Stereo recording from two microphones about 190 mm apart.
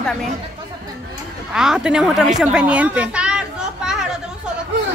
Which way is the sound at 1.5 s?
5° right (ahead or behind).